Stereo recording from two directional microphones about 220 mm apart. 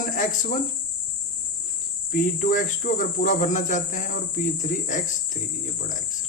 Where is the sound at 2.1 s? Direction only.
35° left (ahead or behind).